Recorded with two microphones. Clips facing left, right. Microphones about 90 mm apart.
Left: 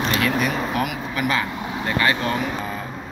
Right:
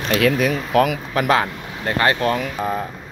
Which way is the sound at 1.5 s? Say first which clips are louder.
Left 4 dB; 10° left (ahead or behind).